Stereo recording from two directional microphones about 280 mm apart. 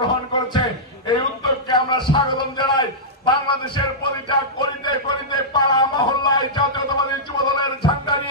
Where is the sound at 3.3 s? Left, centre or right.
Centre.